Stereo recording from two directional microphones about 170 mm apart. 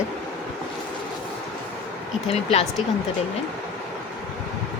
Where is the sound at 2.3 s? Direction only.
40° left (ahead or behind).